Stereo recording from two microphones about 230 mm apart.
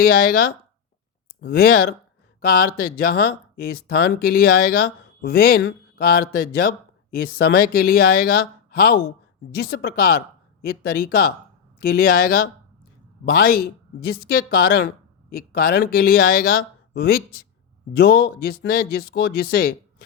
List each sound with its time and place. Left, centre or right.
1.4 s speech: left